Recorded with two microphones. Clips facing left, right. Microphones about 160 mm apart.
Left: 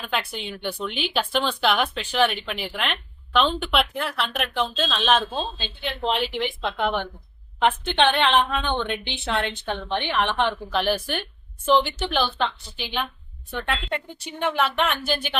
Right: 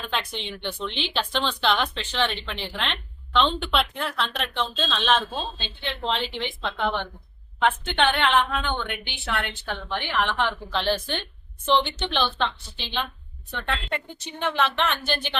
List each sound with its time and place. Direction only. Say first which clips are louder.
0.1 s a woman's voice: left 3 dB; 10° left (ahead or behind)